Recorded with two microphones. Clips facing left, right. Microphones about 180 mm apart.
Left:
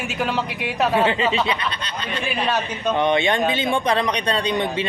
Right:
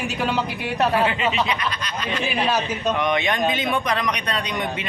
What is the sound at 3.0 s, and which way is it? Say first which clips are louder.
Speech: left 5 dB; 30° left (ahead or behind).